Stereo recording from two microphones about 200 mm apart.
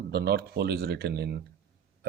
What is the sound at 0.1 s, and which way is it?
Speech, 55° right (ahead or behind).